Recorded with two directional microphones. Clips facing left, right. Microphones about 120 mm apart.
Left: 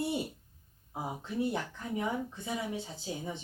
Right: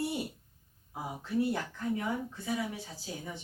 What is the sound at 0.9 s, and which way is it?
Speech, 20° left (ahead or behind).